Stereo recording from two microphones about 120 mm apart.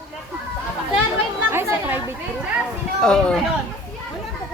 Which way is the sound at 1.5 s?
20° right (ahead or behind).